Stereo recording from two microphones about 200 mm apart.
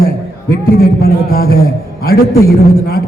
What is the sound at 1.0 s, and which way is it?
Speech, 50° left (ahead or behind).